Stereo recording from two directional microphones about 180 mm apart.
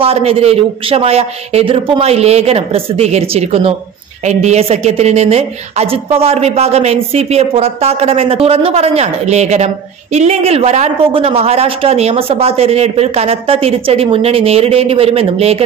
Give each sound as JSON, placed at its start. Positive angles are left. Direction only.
{"t": 0.0, "sound": "a woman's voice", "side_deg": -35}